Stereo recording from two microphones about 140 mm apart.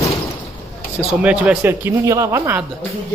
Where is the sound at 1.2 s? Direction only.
10° right (ahead or behind).